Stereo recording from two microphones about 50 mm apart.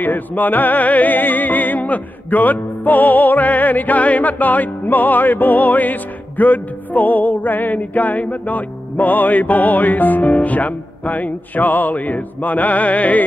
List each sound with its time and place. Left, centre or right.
0.0 s music: left